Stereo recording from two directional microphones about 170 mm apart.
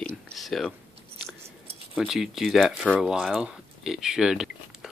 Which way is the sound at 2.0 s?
Centre (ahead or behind).